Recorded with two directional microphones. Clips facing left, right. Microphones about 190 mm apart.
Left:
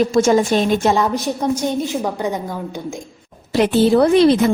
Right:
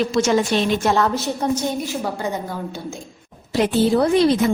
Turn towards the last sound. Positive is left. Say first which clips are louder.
# left 4 dB
turn(degrees=70)  # may be behind; listen again after turning